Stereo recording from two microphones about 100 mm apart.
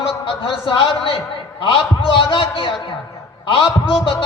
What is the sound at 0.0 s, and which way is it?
A man's voice, 65° left (ahead or behind).